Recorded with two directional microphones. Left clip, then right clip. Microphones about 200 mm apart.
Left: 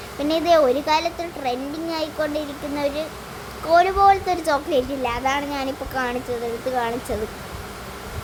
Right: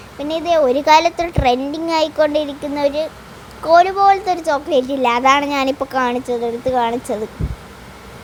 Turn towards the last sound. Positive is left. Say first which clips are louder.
# right 6 dB
turn(degrees=-25)  # may be behind; listen again after turning